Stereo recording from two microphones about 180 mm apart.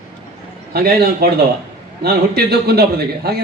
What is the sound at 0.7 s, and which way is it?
A man's voice, 60° right (ahead or behind).